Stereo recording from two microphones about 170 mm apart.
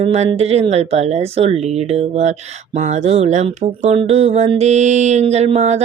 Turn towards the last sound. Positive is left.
turn(degrees=-40)  # may be behind; listen again after turning